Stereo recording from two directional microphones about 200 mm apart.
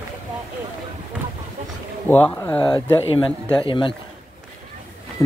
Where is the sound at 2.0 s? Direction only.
10° left (ahead or behind).